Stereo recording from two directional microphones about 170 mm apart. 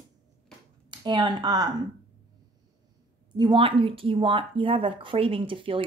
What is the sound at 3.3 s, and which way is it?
Speech, 25° right (ahead or behind).